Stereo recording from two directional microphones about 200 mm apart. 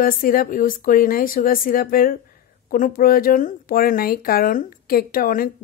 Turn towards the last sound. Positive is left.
turn(degrees=45)  # may be behind; listen again after turning